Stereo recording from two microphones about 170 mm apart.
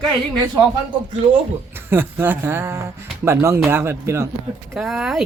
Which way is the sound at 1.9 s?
15° right (ahead or behind).